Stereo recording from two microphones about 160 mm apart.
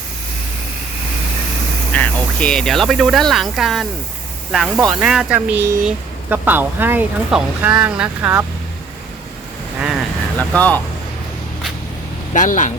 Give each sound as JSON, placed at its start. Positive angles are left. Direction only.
{"t": 1.9, "sound": "speech", "side_deg": 10}
{"t": 10.3, "sound": "speech", "side_deg": 10}
{"t": 12.3, "sound": "speech", "side_deg": 50}